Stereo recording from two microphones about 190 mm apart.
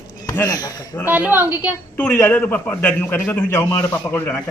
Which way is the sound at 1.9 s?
10° left (ahead or behind).